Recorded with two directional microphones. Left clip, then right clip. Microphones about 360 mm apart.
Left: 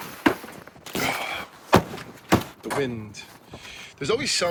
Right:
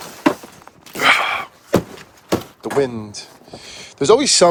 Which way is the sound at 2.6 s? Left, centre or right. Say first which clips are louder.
Right 8 dB; centre.